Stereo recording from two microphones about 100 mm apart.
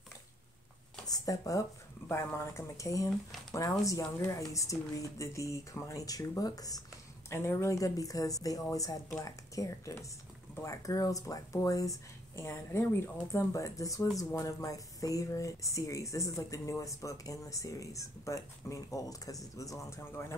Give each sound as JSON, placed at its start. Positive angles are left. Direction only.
{"t": 1.0, "sound": "a sound", "side_deg": 40}
{"t": 2.0, "sound": "speech", "side_deg": 25}
{"t": 7.2, "sound": "speech", "side_deg": 25}